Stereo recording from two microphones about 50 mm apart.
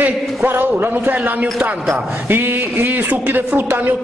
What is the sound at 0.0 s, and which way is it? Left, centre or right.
A man's voice, right.